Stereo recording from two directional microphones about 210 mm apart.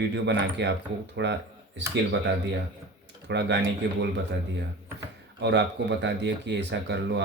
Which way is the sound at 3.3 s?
55° right (ahead or behind).